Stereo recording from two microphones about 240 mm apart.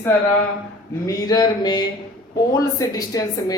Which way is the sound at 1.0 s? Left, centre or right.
Centre.